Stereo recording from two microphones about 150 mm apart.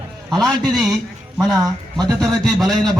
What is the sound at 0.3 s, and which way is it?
A man's voice, centre (ahead or behind).